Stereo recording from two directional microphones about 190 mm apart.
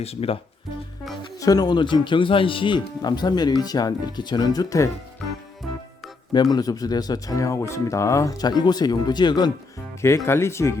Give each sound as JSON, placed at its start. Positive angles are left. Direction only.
{"t": 0.0, "sound": "speech", "side_deg": 30}
{"t": 1.4, "sound": "speech", "side_deg": 20}
{"t": 6.3, "sound": "speech", "side_deg": 20}